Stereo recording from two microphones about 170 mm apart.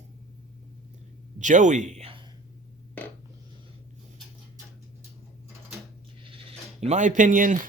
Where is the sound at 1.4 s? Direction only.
45° right (ahead or behind).